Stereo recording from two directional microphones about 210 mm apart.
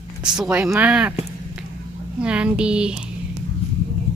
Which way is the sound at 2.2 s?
5° right (ahead or behind).